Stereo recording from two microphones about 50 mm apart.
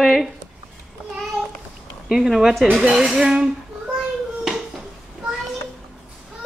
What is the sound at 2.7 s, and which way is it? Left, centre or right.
Speech, right.